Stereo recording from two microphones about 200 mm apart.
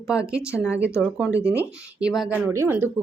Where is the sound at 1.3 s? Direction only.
15° left (ahead or behind).